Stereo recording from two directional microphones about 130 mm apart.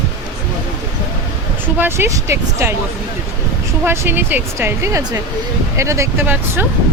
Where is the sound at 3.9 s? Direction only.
15° right (ahead or behind).